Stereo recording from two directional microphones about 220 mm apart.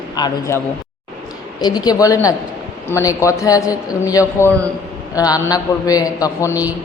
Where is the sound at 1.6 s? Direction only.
20° left (ahead or behind).